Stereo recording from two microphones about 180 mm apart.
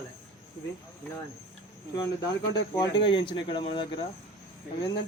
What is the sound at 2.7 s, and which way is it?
Speech, 25° left (ahead or behind).